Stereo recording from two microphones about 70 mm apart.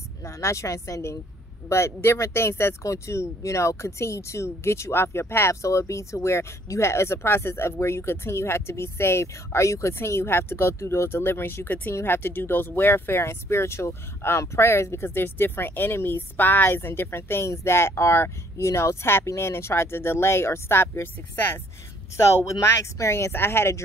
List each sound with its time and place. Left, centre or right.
0.2 s speech: left
5.5 s speech: left
22.1 s speech: left